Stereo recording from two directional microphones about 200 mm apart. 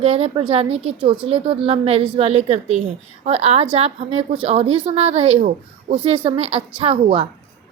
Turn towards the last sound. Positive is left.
turn(degrees=-25)  # may be behind; listen again after turning